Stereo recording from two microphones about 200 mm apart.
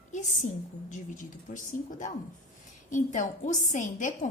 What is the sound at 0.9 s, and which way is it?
A woman's voice, 40° left (ahead or behind).